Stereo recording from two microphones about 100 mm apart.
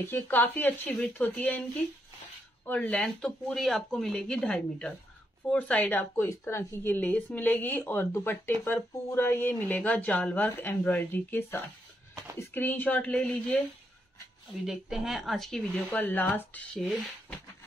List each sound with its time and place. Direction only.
0.0 s a woman's voice: 20° left (ahead or behind)
2.6 s a woman's voice: 15° left (ahead or behind)
14.7 s speech: 5° right (ahead or behind)
16.0 s speech: 15° left (ahead or behind)